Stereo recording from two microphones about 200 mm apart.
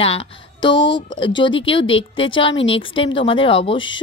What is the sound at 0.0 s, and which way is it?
A woman's voice, 25° left (ahead or behind).